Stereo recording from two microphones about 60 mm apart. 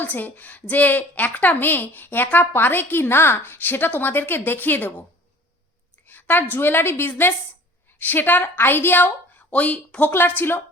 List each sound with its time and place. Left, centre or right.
0.0 s a woman's voice: left
6.1 s a woman's voice: left
10.1 s a woman's voice: left